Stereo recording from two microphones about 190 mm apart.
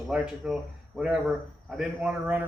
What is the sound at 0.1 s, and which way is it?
Speech, 5° right (ahead or behind).